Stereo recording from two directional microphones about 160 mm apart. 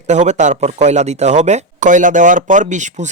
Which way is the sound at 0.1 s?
45° right (ahead or behind).